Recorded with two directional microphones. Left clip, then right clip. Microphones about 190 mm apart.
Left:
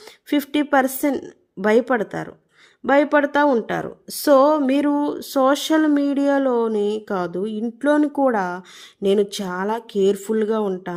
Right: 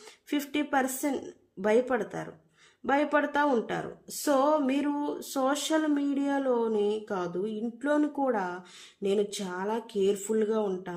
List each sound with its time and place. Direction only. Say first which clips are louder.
0.3 s speech: left 10 dB; 45° left (ahead or behind)